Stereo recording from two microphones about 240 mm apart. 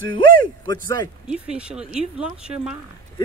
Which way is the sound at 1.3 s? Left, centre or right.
Centre.